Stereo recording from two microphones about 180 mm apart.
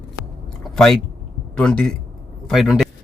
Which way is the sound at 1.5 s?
5° left (ahead or behind).